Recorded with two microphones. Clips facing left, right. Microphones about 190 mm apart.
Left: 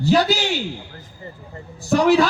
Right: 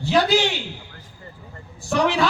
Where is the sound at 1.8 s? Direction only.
40° left (ahead or behind).